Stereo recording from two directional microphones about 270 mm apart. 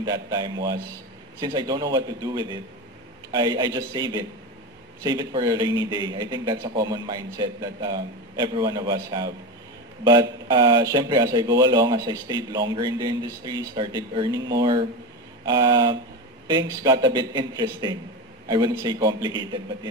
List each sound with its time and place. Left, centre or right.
0.0 s speech: centre